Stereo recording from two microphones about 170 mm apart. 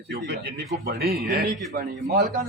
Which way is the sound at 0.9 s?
65° right (ahead or behind).